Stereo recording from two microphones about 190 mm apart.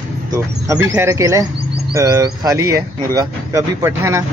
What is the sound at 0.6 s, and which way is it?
Speech, 15° right (ahead or behind).